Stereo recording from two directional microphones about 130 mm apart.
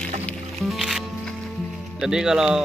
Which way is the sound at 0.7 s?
Centre (ahead or behind).